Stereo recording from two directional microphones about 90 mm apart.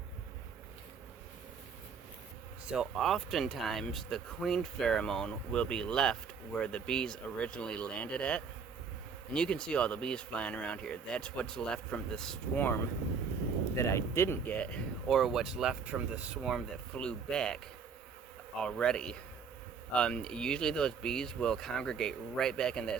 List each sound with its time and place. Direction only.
2.6 s speech: 5° right (ahead or behind)
12.5 s speech: 20° left (ahead or behind)
15.0 s speech: centre (ahead or behind); by 16.4 s 15° right (ahead or behind)
16.4 s speech: centre (ahead or behind)
16.9 s speech: 10° left (ahead or behind)
18.6 s speech: 5° left (ahead or behind)